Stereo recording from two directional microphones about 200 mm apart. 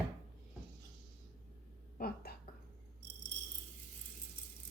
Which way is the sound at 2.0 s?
50° left (ahead or behind).